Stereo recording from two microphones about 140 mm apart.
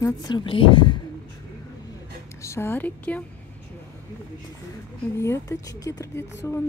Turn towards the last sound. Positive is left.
turn(degrees=20)  # may be behind; listen again after turning